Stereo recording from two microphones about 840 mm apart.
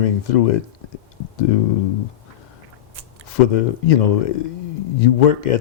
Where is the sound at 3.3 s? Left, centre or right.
Left.